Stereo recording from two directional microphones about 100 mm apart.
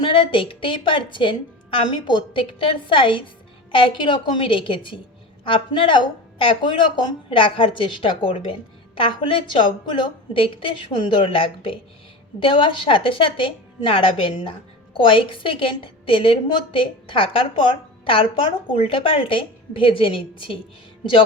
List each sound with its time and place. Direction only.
0.0 s a woman's voice: 55° left (ahead or behind)